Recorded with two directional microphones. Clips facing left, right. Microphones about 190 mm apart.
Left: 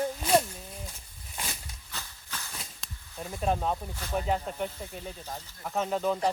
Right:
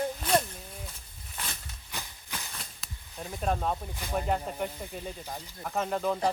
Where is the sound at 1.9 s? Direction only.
15° right (ahead or behind).